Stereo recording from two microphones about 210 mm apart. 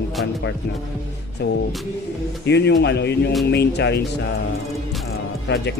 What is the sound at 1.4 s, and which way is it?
Speech, 50° left (ahead or behind).